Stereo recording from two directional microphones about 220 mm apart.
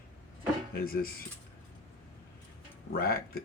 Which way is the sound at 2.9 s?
40° left (ahead or behind).